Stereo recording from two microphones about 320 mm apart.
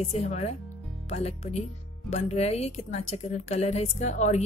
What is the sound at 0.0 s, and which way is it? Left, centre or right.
Speech, centre.